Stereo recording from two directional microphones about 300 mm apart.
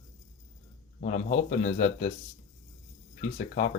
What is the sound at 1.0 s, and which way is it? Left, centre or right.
A man's voice, left.